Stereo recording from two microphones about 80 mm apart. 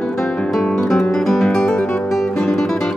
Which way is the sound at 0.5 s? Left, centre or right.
Centre.